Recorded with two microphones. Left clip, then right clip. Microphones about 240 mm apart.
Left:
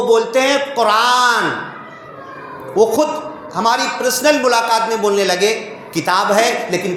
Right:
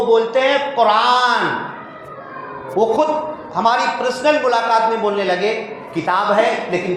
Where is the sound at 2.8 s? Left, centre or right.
Left.